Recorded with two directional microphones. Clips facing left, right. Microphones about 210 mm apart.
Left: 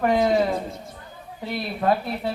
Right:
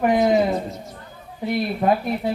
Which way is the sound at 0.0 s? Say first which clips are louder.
Right 2 dB; 15° right (ahead or behind).